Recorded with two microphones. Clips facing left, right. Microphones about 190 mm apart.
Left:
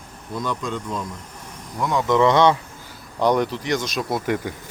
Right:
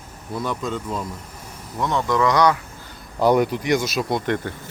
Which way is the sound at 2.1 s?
25° left (ahead or behind).